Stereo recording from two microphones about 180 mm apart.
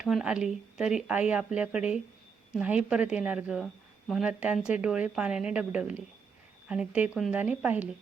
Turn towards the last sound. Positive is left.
turn(degrees=-10)  # may be behind; listen again after turning